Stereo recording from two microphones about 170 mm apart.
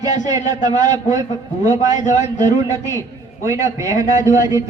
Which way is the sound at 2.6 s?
20° right (ahead or behind).